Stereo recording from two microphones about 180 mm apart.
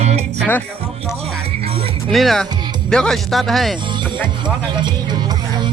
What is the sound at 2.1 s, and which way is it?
Speech, centre (ahead or behind).